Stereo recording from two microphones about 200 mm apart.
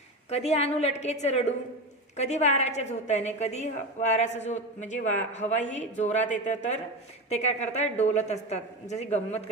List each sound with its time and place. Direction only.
0.3 s a woman's voice: 30° left (ahead or behind)